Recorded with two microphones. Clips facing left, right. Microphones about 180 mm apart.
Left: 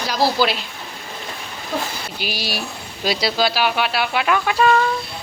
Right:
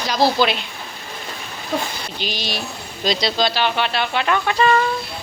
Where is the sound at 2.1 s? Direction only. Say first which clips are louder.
Even; 10° left (ahead or behind).